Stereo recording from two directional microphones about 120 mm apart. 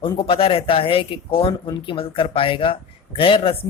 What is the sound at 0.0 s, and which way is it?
Speech, 50° left (ahead or behind).